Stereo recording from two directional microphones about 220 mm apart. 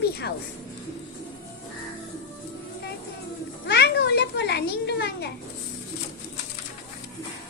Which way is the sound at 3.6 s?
50° left (ahead or behind).